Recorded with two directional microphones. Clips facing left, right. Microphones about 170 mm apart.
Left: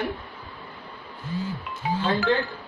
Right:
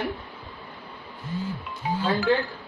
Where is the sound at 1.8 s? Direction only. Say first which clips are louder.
Left 1 dB; 75° left (ahead or behind).